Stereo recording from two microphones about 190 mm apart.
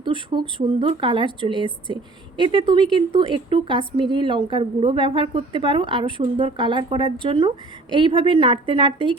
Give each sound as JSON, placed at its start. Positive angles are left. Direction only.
{"t": 0.0, "sound": "speech", "side_deg": -25}